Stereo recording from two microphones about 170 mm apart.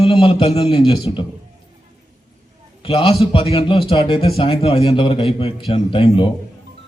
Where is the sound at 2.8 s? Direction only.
35° left (ahead or behind).